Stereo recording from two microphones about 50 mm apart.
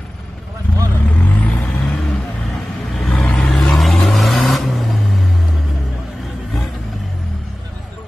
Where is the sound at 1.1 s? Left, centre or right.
Left.